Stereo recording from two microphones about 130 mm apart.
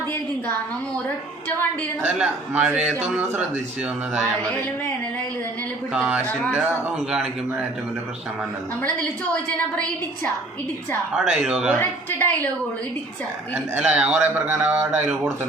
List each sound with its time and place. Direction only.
2.0 s a man's voice: 10° right (ahead or behind)
5.9 s a man's voice: 10° right (ahead or behind)
11.1 s a man's voice: 5° right (ahead or behind)
11.8 s a woman's voice: 15° left (ahead or behind)
13.5 s a man's voice: 10° right (ahead or behind)